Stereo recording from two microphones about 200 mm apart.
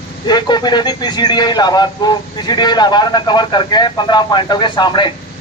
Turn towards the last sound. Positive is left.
turn(degrees=25)  # may be behind; listen again after turning